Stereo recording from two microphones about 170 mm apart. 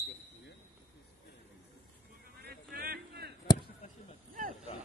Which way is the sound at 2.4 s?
60° right (ahead or behind).